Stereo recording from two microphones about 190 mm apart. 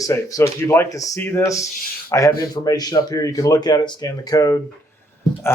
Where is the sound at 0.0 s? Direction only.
15° left (ahead or behind).